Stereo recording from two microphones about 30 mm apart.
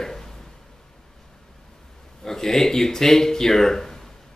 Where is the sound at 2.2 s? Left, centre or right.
Centre.